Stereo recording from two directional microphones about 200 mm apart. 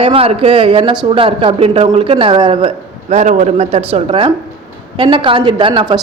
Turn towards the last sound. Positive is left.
turn(degrees=-25)  # may be behind; listen again after turning